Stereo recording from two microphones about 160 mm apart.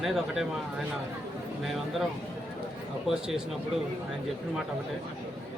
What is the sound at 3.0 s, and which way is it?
Speech, 5° right (ahead or behind).